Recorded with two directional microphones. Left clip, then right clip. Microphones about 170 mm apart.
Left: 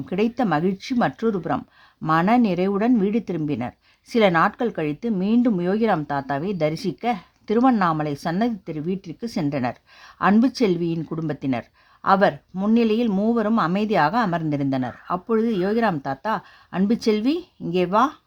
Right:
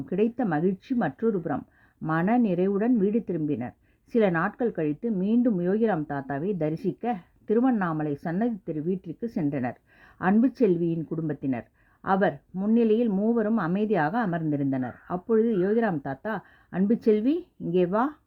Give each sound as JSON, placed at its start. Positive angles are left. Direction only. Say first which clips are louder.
{"t": 0.0, "sound": "speech", "louder": "left 3 dB", "side_deg": 25}